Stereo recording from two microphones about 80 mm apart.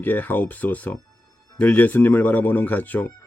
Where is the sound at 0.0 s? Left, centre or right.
Left.